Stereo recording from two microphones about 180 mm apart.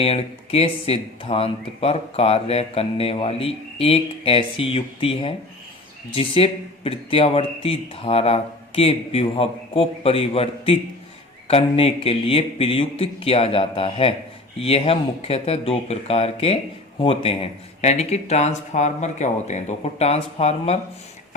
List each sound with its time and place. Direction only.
0.0 s speech: 35° left (ahead or behind)